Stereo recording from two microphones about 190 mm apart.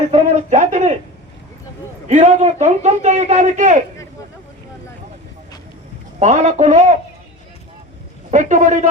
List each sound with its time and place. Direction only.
0.1 s a man's voice: 35° right (ahead or behind)
2.0 s a man's voice: 35° right (ahead or behind)
6.1 s a man's voice: 35° right (ahead or behind)
8.3 s a man's voice: 40° right (ahead or behind)